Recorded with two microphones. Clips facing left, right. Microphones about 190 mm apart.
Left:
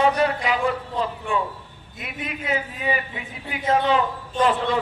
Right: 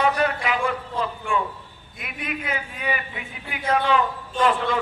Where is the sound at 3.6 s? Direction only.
20° left (ahead or behind).